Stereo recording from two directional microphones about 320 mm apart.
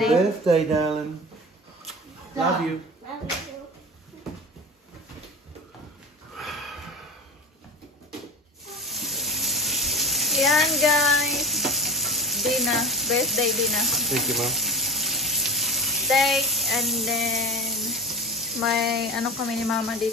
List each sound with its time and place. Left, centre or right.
0.0 s speech: centre
6.3 s a sound: centre
8.7 s bathtub: centre